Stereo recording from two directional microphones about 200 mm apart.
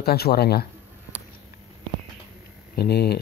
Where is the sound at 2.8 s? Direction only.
55° left (ahead or behind).